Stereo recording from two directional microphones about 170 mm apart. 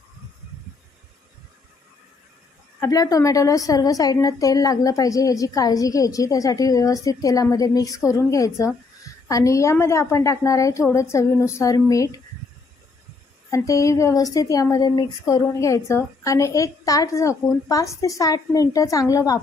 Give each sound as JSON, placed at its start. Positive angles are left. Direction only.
{"t": 2.8, "sound": "a woman's voice", "side_deg": 20}
{"t": 13.5, "sound": "a woman's voice", "side_deg": 20}